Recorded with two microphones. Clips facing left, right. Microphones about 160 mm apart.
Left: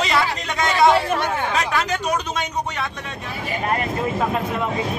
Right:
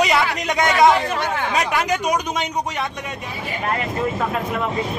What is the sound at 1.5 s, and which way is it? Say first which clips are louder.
Speech: right 2 dB; 15° right (ahead or behind).